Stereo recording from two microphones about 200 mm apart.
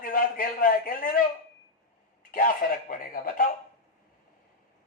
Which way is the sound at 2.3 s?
45° left (ahead or behind).